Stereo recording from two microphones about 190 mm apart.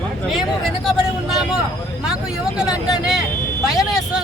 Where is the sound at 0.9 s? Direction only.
Centre (ahead or behind).